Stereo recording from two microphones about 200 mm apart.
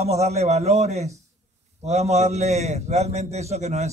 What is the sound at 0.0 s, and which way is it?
A man's voice, 35° right (ahead or behind).